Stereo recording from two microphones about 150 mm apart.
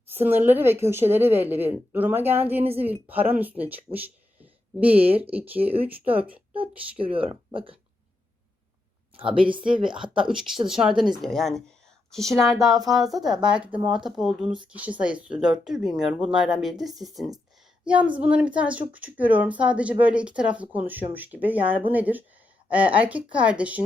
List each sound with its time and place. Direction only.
0.1 s speech: 15° right (ahead or behind)
5.0 s speech: 40° right (ahead or behind)
5.3 s speech: 10° right (ahead or behind)
7.0 s speech: 35° right (ahead or behind)
9.6 s speech: 5° right (ahead or behind)